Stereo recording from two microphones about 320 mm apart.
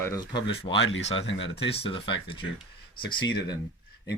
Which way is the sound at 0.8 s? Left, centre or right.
Left.